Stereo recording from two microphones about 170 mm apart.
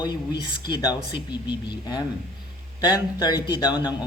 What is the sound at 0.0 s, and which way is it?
A man's voice, 25° left (ahead or behind).